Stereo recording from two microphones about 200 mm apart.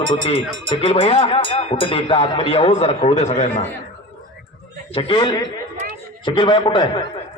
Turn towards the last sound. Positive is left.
turn(degrees=25)  # may be behind; listen again after turning